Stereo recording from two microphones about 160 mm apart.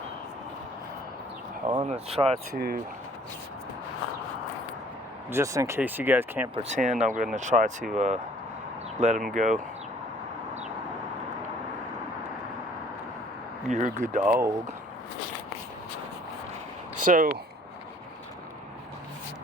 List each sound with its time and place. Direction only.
1.8 s speech: 40° right (ahead or behind)
2.6 s speech: 70° right (ahead or behind)
5.3 s speech: 20° right (ahead or behind)
6.6 s speech: 45° right (ahead or behind)
13.7 s speech: 50° right (ahead or behind)
14.3 s speech: 15° right (ahead or behind)
17.0 s speech: 60° right (ahead or behind)